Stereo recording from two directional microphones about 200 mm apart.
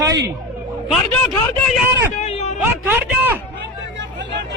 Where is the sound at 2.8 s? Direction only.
10° right (ahead or behind).